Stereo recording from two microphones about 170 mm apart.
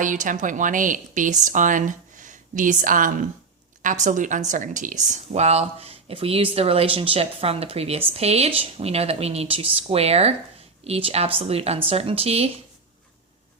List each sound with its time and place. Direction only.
0.0 s speech: 50° right (ahead or behind)